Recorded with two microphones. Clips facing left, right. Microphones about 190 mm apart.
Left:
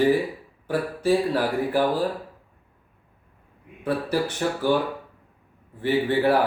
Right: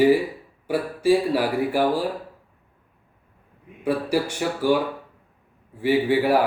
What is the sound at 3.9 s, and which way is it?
Speech, 10° right (ahead or behind).